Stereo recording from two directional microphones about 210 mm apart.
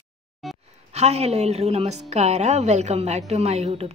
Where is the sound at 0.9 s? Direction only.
30° right (ahead or behind).